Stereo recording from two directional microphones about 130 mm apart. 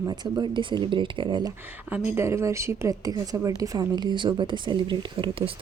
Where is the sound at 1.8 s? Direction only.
15° right (ahead or behind).